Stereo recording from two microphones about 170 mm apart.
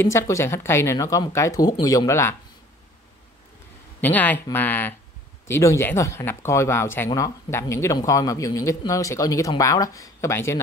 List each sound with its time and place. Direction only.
0.0 s speech: 15° left (ahead or behind)
4.0 s speech: 10° left (ahead or behind)